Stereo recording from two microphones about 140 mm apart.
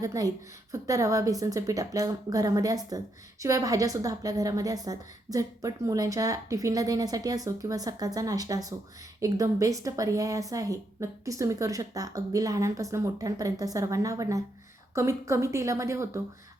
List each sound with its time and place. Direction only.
0.0 s a woman's voice: 25° right (ahead or behind)